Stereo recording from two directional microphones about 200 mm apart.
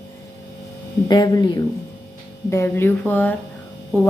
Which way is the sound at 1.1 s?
20° left (ahead or behind).